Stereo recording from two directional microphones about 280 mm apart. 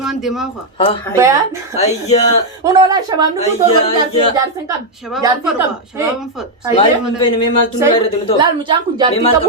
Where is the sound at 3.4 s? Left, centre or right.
Left.